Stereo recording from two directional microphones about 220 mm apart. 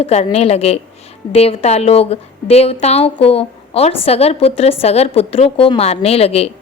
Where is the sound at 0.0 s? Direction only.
30° left (ahead or behind).